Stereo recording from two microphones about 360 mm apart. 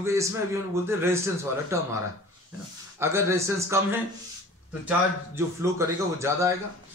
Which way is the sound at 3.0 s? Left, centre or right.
Centre.